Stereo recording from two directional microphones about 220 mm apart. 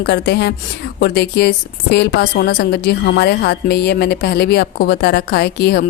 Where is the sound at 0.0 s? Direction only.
50° left (ahead or behind).